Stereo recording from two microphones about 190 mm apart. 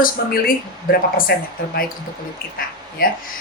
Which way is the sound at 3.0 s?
50° left (ahead or behind).